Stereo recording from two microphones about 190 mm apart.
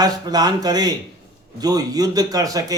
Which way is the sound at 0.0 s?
20° right (ahead or behind).